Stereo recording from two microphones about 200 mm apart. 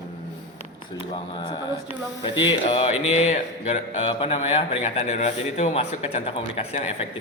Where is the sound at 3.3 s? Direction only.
35° left (ahead or behind).